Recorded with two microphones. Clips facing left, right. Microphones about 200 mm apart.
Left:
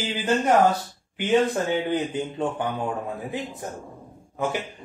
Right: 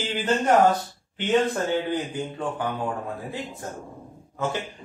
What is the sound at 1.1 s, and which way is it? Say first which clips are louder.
Speech: left 1 dB; 15° left (ahead or behind).